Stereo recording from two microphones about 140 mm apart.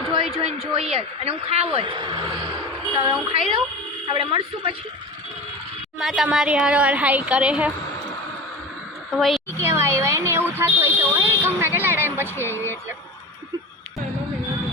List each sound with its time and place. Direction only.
0.1 s a woman's voice: 40° right (ahead or behind)
6.0 s a woman's voice: centre (ahead or behind)
9.1 s a woman's voice: centre (ahead or behind)
9.6 s a sound: 20° right (ahead or behind)
10.6 s fire alarm: 15° right (ahead or behind)
11.4 s a sound: 15° right (ahead or behind)
12.4 s speech: 15° left (ahead or behind)